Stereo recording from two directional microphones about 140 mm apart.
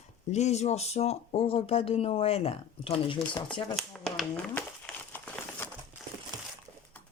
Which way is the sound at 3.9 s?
5° left (ahead or behind).